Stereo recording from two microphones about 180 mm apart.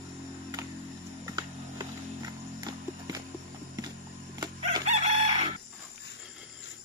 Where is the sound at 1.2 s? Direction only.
20° right (ahead or behind).